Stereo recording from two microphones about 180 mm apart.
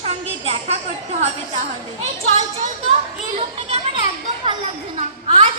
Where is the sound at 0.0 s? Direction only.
35° right (ahead or behind).